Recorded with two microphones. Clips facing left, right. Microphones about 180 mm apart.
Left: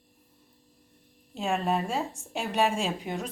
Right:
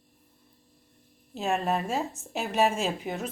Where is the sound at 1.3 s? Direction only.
Centre (ahead or behind).